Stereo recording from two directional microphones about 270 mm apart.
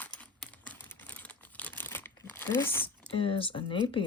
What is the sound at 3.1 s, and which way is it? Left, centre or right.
Speech, centre.